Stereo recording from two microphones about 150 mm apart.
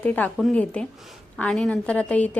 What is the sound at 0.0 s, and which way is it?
A woman's voice, 10° left (ahead or behind).